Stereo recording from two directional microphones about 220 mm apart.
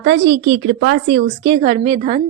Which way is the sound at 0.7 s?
50° right (ahead or behind).